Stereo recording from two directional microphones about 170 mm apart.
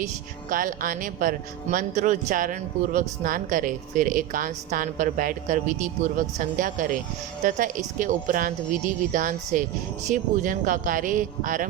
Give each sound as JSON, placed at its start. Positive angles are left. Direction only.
{"t": 0.5, "sound": "speech", "side_deg": -50}
{"t": 7.9, "sound": "speech", "side_deg": -50}